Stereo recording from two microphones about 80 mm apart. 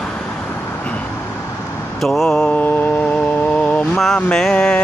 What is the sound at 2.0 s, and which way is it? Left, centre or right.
Mantra, centre.